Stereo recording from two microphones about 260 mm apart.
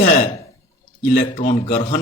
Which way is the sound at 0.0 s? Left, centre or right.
Left.